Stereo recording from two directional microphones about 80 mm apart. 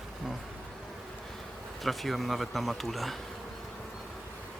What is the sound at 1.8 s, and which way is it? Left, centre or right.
Speech, centre.